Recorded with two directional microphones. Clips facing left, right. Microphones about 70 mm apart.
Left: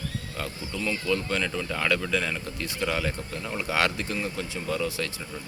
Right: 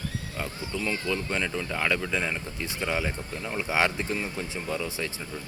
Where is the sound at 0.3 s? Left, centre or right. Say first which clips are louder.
Right 1 dB; centre.